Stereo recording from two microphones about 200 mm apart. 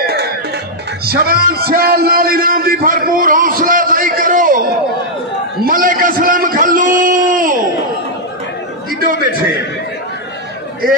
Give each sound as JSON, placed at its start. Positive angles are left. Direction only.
{"t": 0.0, "sound": "music", "side_deg": -55}
{"t": 1.0, "sound": "a man's voice", "side_deg": -50}
{"t": 5.6, "sound": "a sound", "side_deg": -45}